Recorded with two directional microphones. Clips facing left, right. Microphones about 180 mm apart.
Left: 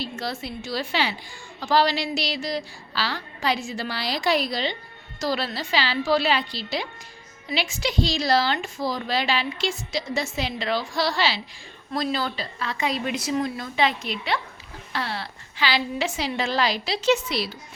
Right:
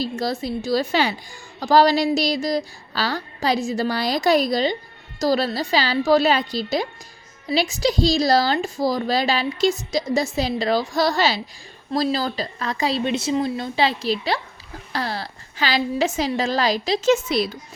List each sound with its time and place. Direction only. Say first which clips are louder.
0.0 s a woman's voice: right 6 dB; 40° right (ahead or behind)